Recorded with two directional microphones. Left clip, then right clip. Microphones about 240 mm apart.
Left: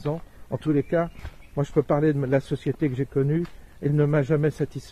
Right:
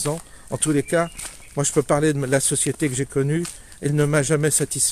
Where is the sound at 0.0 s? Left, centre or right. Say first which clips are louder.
Right 4 dB; centre.